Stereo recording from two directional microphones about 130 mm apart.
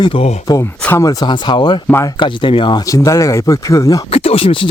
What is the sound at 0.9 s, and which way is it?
Speech, 20° left (ahead or behind).